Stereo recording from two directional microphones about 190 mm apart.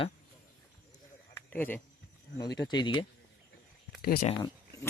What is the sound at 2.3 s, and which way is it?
Speech, 20° left (ahead or behind).